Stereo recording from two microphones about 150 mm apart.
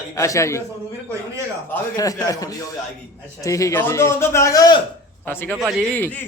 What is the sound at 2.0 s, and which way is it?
Speech, 25° left (ahead or behind).